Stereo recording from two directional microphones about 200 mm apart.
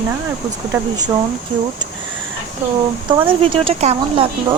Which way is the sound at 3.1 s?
25° right (ahead or behind).